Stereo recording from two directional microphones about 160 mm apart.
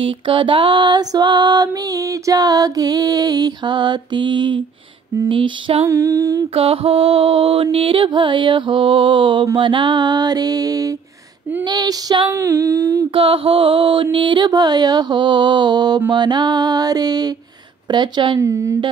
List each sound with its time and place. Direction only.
0.0 s music: 30° right (ahead or behind)
5.9 s music: 20° right (ahead or behind)
6.5 s music: 35° right (ahead or behind); by 13.0 s 20° right (ahead or behind)
13.1 s music: 35° right (ahead or behind)
18.4 s a woman's voice: 20° right (ahead or behind)